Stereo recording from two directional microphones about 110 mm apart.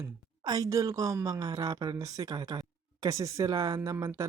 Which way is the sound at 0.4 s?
35° right (ahead or behind).